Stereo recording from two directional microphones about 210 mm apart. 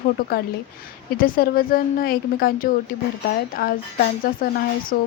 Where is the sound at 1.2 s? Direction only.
45° left (ahead or behind).